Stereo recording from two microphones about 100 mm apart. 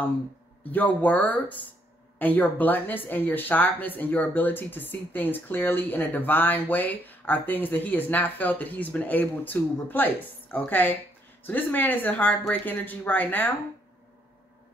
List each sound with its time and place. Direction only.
0.7 s speech: 15° left (ahead or behind)